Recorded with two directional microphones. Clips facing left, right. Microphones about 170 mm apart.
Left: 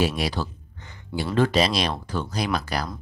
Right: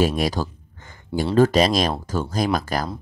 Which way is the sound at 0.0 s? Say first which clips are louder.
Right 4 dB; 45° right (ahead or behind).